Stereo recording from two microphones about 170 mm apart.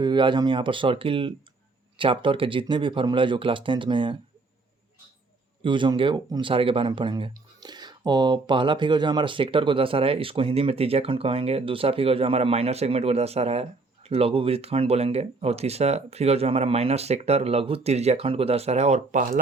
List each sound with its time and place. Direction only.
0.0 s speech: 25° right (ahead or behind)
5.6 s speech: 30° right (ahead or behind); by 19.4 s 50° right (ahead or behind)